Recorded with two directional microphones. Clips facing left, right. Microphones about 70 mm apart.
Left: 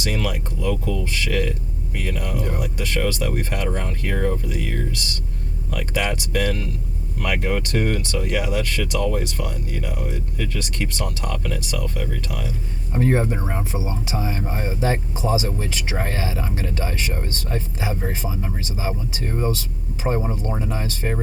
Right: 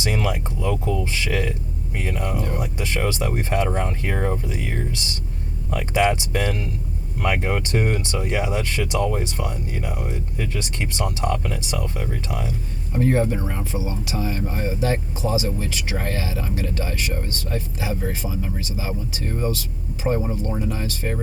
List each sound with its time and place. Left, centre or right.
0.0 s speech: right
12.9 s speech: left